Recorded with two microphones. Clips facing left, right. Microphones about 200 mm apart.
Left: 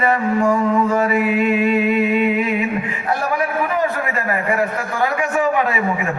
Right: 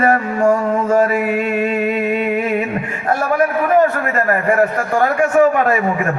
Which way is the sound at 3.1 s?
50° right (ahead or behind).